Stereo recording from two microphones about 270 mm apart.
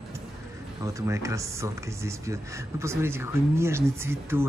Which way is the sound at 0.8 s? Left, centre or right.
Centre.